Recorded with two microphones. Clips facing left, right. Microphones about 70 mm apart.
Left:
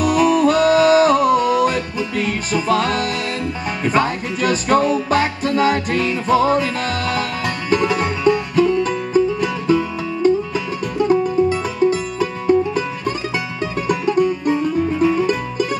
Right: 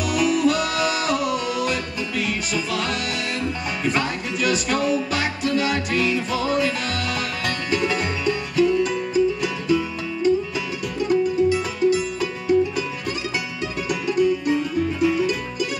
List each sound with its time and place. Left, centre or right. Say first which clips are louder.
0.0 s music: left 5 dB; left
13.8 s music: left 3 dB; left